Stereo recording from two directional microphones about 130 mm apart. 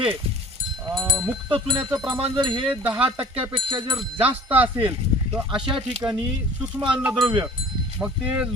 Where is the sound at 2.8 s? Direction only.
10° right (ahead or behind).